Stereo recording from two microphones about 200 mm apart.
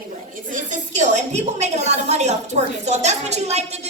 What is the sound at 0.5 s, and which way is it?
A woman's voice, 40° right (ahead or behind).